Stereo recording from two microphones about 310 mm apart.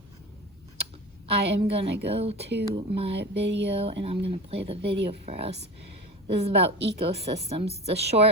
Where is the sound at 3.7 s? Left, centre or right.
Centre.